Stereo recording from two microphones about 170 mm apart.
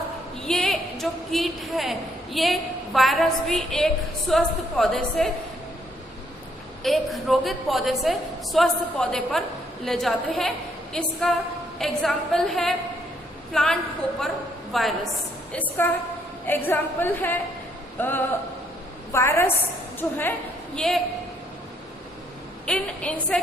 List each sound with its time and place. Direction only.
0.4 s a woman's voice: 5° left (ahead or behind)
6.8 s a woman's voice: centre (ahead or behind)
15.8 s a woman's voice: 15° left (ahead or behind)
22.6 s a woman's voice: 5° left (ahead or behind)